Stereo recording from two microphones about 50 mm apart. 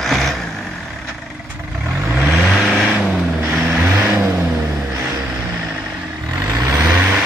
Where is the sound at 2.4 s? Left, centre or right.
Centre.